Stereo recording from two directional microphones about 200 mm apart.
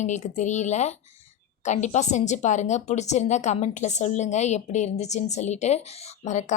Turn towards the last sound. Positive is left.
turn(degrees=35)  # may be behind; listen again after turning